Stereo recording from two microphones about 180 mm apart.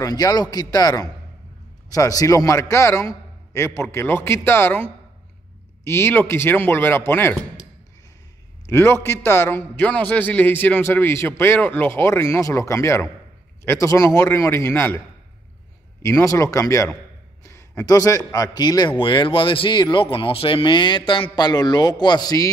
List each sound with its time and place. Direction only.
0.0 s a man's voice: 20° left (ahead or behind)
5.9 s a man's voice: 15° left (ahead or behind)
8.6 s a man's voice: 15° left (ahead or behind)
16.0 s a man's voice: 15° left (ahead or behind)